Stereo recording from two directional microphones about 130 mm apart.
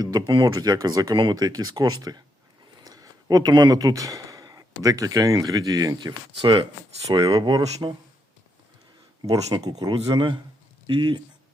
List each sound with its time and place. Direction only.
0.0 s speech: 30° right (ahead or behind)
9.2 s speech: 30° right (ahead or behind)